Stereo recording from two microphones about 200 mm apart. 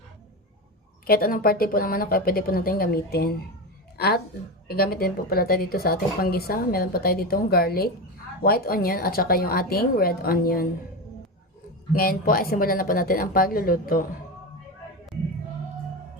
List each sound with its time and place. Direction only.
1.0 s a woman's voice: 45° left (ahead or behind)
11.9 s a woman's voice: 45° left (ahead or behind)